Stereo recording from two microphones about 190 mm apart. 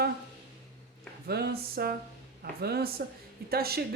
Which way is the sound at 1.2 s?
55° right (ahead or behind).